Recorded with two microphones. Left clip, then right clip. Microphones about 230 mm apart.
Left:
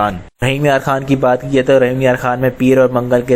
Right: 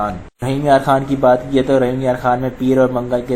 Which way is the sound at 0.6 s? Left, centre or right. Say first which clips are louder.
Right 3 dB; left.